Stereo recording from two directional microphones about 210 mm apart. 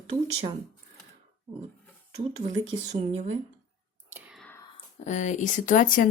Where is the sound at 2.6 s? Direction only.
30° right (ahead or behind).